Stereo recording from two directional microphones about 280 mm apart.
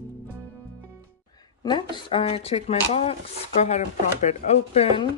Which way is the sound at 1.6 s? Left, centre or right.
Centre.